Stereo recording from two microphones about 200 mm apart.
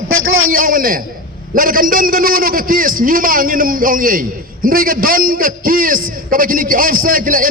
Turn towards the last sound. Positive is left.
turn(degrees=-45)  # may be behind; listen again after turning